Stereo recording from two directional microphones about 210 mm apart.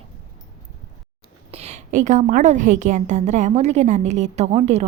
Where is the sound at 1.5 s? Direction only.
30° right (ahead or behind).